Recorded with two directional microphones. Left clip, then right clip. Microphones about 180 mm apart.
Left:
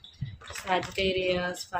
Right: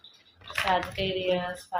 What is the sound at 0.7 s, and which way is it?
Speech, 25° left (ahead or behind).